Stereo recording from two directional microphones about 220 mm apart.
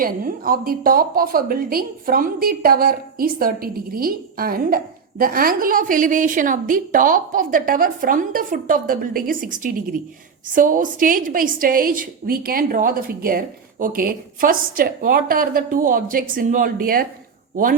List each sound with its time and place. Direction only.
0.0 s a woman's voice: 40° right (ahead or behind)